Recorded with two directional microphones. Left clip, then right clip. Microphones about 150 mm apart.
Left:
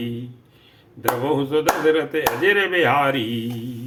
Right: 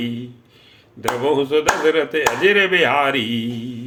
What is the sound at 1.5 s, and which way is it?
Speech, 35° right (ahead or behind).